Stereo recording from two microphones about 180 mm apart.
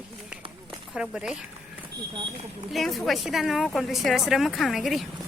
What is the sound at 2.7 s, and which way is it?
Speech, centre (ahead or behind).